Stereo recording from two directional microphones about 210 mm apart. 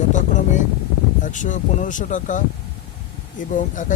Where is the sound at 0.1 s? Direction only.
35° left (ahead or behind).